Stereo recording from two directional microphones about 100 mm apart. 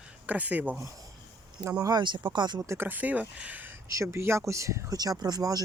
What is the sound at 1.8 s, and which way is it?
Speech, 45° right (ahead or behind).